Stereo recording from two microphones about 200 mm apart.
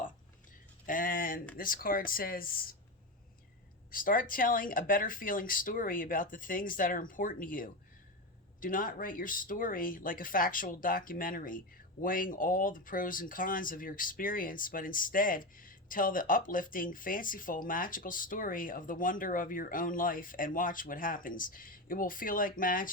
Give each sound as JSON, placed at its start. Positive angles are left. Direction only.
{"t": 0.9, "sound": "a sound", "side_deg": 45}
{"t": 1.5, "sound": "speech", "side_deg": 45}
{"t": 3.9, "sound": "speech", "side_deg": 45}